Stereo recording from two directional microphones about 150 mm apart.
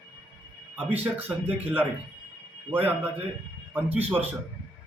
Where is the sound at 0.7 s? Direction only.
10° right (ahead or behind).